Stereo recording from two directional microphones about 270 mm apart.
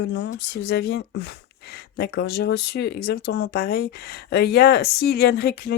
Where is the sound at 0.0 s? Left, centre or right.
Left.